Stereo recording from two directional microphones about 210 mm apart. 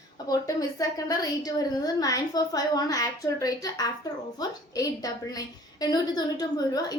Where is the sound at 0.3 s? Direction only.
15° left (ahead or behind).